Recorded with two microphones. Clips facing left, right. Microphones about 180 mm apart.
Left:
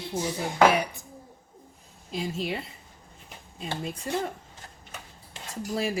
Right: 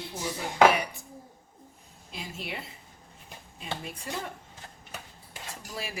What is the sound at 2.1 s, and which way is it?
Speech, 35° left (ahead or behind).